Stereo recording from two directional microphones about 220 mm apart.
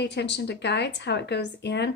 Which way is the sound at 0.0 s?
50° left (ahead or behind).